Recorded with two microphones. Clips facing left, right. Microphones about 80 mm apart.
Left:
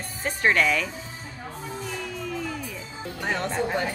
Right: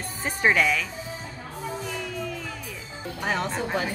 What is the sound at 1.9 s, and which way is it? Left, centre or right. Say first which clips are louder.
Music: right 1 dB; centre.